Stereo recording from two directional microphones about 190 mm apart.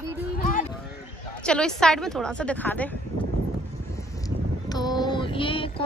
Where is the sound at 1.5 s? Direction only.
5° left (ahead or behind).